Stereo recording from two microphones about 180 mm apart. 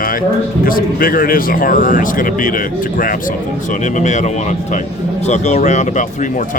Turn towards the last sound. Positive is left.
turn(degrees=45)  # may be behind; listen again after turning